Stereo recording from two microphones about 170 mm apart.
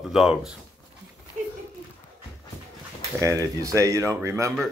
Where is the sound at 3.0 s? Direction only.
20° right (ahead or behind).